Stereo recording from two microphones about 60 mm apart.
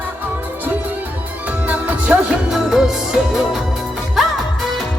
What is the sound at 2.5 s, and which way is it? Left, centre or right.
Music, centre.